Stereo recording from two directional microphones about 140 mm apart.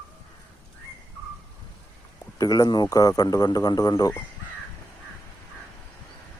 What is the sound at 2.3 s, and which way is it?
A man's voice, 25° left (ahead or behind).